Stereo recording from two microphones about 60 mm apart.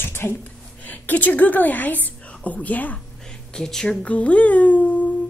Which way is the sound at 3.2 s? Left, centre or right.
Centre.